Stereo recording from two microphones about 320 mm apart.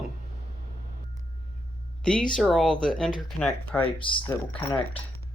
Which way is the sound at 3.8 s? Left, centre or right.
Centre.